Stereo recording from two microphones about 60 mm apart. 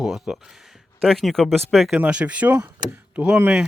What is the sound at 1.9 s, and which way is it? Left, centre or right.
Speech, centre.